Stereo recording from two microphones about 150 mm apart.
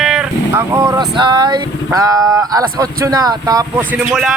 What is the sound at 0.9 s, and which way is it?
Speech, 30° right (ahead or behind).